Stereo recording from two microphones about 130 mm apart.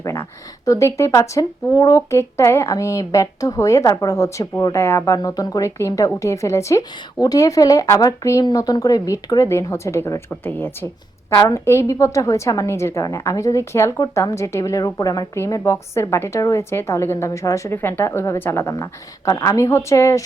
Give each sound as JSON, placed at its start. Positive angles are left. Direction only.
{"t": 0.0, "sound": "a sound", "side_deg": 25}
{"t": 1.8, "sound": "speech", "side_deg": 25}
{"t": 11.3, "sound": "speech", "side_deg": 30}